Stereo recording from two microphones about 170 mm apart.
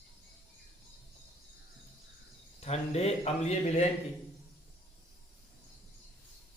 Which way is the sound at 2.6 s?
40° left (ahead or behind).